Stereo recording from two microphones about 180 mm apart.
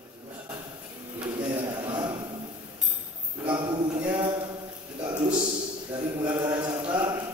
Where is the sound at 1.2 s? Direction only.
25° right (ahead or behind).